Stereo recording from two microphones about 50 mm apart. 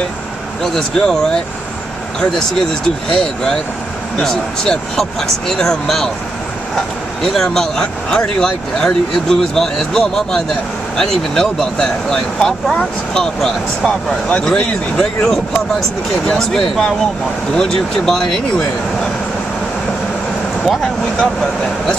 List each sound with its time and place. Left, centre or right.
0.7 s speech: centre
3.1 s speech: centre
7.3 s speech: centre
20.6 s vehicle: centre